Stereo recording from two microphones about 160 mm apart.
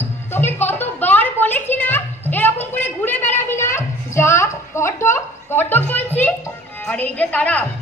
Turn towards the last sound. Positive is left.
turn(degrees=10)  # may be behind; listen again after turning